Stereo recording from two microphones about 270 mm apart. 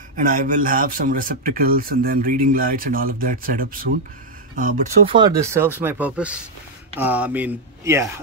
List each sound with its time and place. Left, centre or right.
0.1 s speech: right
5.1 s speech: centre